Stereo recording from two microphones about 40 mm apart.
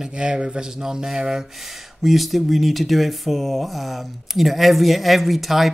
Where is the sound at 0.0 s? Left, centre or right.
Right.